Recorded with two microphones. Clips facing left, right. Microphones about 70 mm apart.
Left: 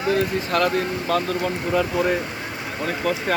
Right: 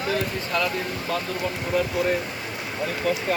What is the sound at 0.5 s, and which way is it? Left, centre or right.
Speech, left.